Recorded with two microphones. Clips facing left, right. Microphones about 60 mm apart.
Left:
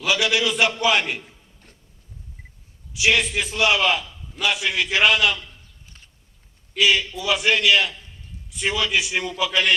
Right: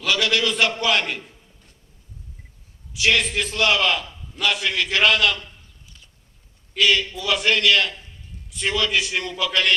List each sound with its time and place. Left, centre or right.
0.0 s a man's voice: centre
2.9 s a man's voice: centre
5.8 s a sound: left
6.7 s a man's voice: centre